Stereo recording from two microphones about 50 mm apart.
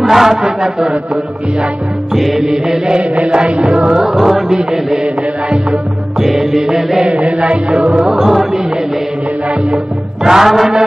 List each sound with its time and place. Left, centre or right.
0.0 s chant: centre
2.1 s music: centre
5.0 s music: centre
6.1 s music: centre
7.1 s music: right
8.2 s music: centre
10.2 s music: centre